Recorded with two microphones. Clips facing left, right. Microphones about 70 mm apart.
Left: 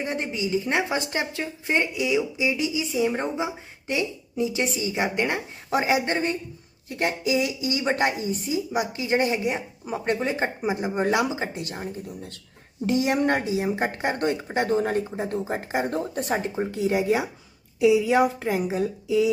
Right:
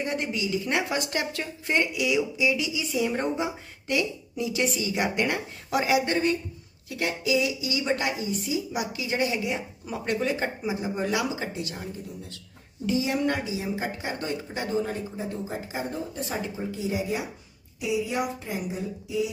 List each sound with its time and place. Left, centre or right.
0.0 s a woman's voice: left
2.0 s a woman's voice: left
2.9 s a woman's voice: centre
10.6 s a woman's voice: left
16.4 s a woman's voice: left
16.8 s speech: left
18.0 s a woman's voice: left